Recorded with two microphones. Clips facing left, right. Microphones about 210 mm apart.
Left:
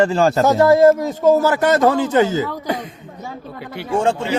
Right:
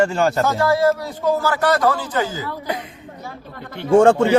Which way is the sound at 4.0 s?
50° right (ahead or behind).